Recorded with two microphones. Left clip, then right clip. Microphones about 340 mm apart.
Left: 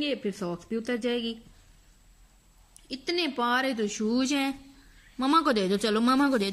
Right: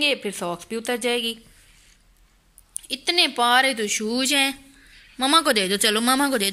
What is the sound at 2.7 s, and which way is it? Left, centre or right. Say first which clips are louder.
Speech: right 8 dB; centre.